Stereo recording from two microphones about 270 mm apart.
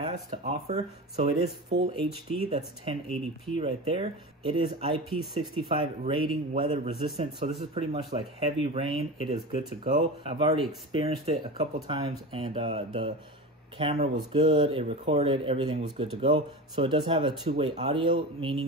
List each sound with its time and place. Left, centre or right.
0.0 s a man's voice: right
1.7 s speech: right
2.5 s a man's voice: right